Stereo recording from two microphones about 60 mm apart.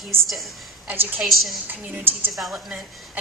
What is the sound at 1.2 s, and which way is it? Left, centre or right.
Speech, centre.